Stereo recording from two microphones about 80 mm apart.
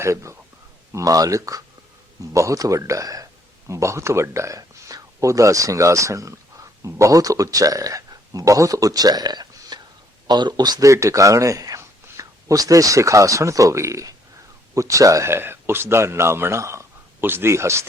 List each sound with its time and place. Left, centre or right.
0.0 s speech: right
0.9 s speech: right